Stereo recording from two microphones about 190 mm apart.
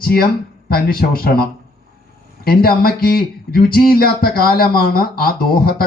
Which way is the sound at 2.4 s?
50° left (ahead or behind).